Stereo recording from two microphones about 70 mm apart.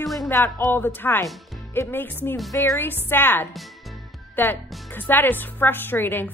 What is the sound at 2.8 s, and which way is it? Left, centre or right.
A woman's voice, left.